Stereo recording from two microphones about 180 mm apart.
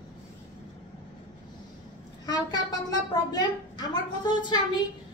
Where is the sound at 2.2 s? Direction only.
20° left (ahead or behind).